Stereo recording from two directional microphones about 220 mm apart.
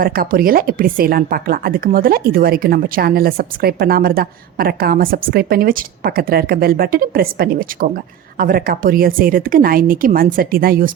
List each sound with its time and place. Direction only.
0.0 s a woman's voice: 40° right (ahead or behind)